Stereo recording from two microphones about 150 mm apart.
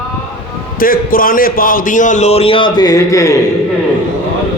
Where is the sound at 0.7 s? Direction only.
70° left (ahead or behind); by 3.4 s 20° left (ahead or behind).